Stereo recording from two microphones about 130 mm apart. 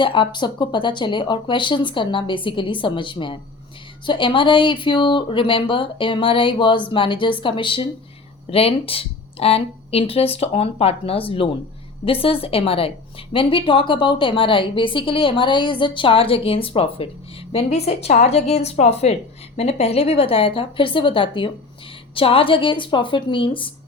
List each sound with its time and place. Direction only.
0.0 s a woman's voice: 40° left (ahead or behind)